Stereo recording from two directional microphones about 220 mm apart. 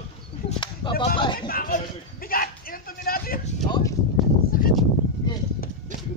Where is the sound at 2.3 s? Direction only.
40° left (ahead or behind).